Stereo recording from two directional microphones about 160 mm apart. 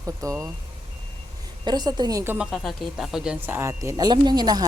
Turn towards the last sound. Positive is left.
turn(degrees=-25)  # may be behind; listen again after turning